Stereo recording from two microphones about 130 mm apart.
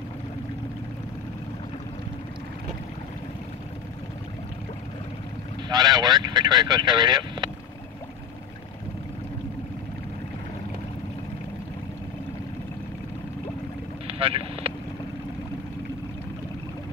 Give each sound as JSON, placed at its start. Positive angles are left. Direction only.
{"t": 5.7, "sound": "speech", "side_deg": -30}
{"t": 14.0, "sound": "vehicle", "side_deg": -45}